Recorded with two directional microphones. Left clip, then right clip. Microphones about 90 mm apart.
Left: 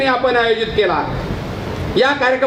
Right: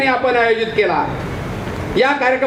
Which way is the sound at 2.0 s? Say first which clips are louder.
Even; 25° left (ahead or behind).